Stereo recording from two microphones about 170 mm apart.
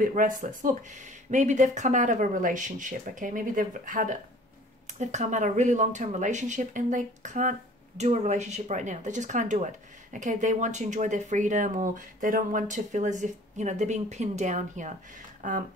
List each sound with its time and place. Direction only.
0.0 s speech: 50° right (ahead or behind)